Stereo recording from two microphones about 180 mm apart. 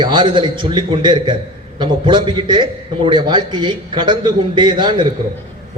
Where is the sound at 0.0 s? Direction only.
25° right (ahead or behind).